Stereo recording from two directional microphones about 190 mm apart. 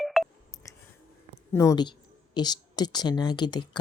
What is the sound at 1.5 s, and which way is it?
Speech, 15° left (ahead or behind).